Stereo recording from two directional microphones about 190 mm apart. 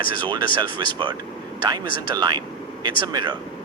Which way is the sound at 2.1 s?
20° right (ahead or behind).